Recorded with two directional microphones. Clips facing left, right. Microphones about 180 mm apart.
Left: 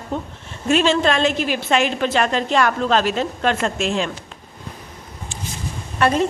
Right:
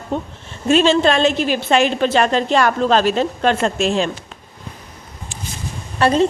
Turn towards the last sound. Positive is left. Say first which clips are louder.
# right 3 dB
turn(degrees=-30)  # may be behind; listen again after turning